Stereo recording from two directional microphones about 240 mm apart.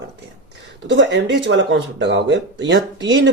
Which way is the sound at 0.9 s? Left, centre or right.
Right.